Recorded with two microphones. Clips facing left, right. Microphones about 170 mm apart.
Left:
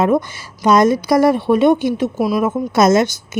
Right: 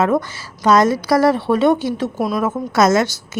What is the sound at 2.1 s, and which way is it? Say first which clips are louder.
Speech: left 3 dB; 5° left (ahead or behind).